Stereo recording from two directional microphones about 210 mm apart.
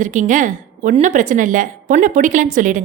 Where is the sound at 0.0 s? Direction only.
35° right (ahead or behind).